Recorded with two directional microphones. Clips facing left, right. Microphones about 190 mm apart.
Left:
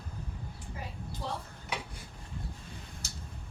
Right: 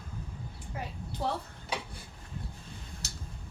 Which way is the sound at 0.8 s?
65° right (ahead or behind).